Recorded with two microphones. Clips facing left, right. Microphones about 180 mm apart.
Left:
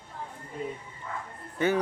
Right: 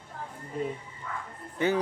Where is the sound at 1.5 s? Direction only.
20° right (ahead or behind).